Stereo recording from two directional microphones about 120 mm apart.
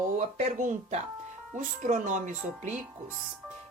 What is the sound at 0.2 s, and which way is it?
Speech, 85° right.